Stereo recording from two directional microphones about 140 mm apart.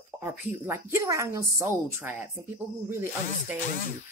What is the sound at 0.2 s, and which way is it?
Speech, 15° right (ahead or behind).